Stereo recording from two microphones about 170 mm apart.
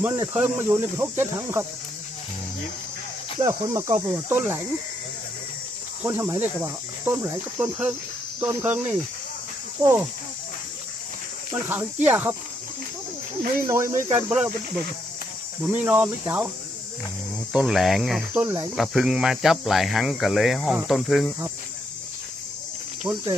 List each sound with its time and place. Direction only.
0.0 s speech: 10° right (ahead or behind)
3.4 s speech: 15° right (ahead or behind)
6.0 s speech: 15° right (ahead or behind)
11.5 s speech: 15° right (ahead or behind)
13.6 s speech: 15° right (ahead or behind)
15.7 s speech: 10° right (ahead or behind)
17.5 s speech: 5° right (ahead or behind)
18.3 s speech: 15° right (ahead or behind)
18.8 s speech: centre (ahead or behind)
23.1 s speech: 10° right (ahead or behind)